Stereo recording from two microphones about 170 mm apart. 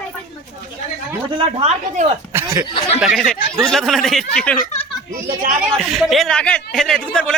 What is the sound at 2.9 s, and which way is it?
Speech, centre (ahead or behind).